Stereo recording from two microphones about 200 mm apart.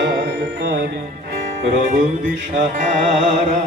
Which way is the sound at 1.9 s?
45° right (ahead or behind).